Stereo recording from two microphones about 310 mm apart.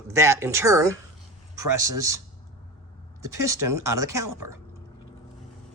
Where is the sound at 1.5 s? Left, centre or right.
Right.